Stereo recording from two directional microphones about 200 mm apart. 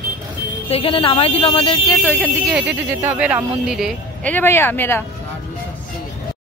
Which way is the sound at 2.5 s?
10° right (ahead or behind).